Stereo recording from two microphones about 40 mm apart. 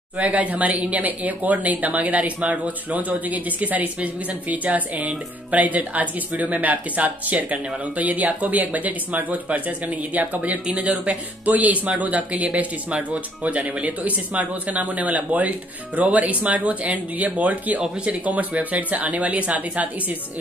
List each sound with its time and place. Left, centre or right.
0.2 s speech: right